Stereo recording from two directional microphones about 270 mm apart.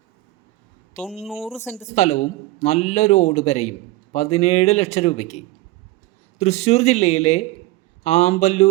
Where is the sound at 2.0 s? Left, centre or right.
Left.